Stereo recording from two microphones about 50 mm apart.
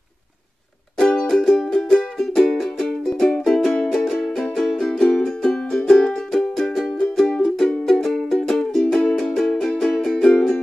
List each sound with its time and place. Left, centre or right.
0.9 s music: centre
3.1 s music: centre